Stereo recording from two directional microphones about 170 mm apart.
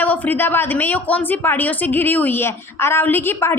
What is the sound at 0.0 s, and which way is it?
A woman's voice, 10° left (ahead or behind).